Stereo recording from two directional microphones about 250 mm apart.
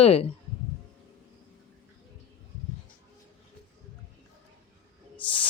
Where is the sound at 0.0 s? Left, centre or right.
Left.